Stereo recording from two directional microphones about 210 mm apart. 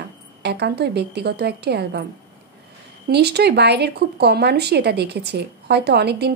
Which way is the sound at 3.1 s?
50° right (ahead or behind).